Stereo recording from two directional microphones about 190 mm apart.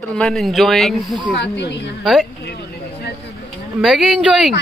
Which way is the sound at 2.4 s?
60° left (ahead or behind).